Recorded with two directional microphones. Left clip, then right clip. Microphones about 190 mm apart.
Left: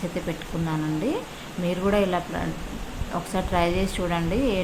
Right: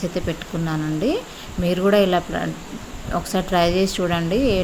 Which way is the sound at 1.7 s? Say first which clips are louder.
Right 6 dB; 20° right (ahead or behind).